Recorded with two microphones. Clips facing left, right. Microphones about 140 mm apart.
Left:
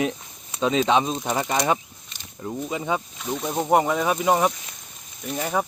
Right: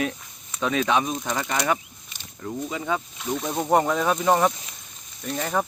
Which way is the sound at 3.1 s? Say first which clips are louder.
Left 1 dB; centre (ahead or behind).